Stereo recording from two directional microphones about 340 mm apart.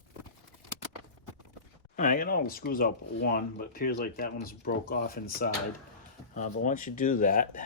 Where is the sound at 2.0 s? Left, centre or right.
Left.